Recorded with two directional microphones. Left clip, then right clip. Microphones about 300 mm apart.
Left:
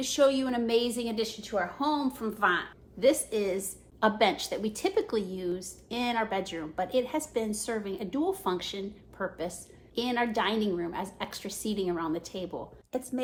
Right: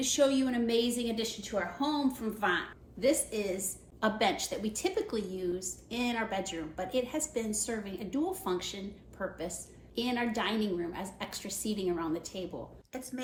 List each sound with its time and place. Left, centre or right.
0.0 s a woman's voice: centre
12.9 s speech: centre